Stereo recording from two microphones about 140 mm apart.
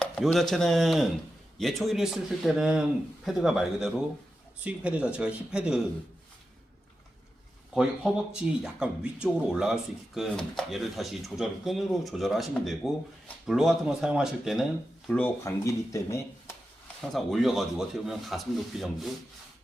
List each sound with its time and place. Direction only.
0.0 s speech: 5° left (ahead or behind)
7.7 s speech: 5° right (ahead or behind)
15.4 s speech: 20° left (ahead or behind)
17.0 s speech: centre (ahead or behind)